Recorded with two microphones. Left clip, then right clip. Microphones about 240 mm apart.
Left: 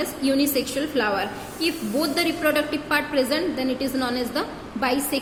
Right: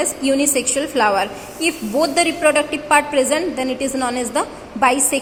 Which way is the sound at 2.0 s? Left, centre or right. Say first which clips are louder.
Right 8 dB; centre.